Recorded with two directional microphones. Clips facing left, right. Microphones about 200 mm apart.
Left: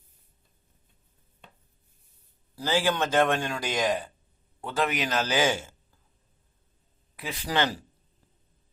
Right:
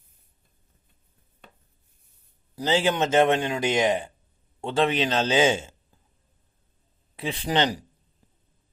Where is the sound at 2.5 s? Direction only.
20° right (ahead or behind).